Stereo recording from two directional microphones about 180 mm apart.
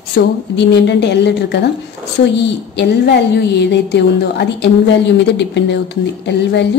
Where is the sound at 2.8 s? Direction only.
70° left (ahead or behind).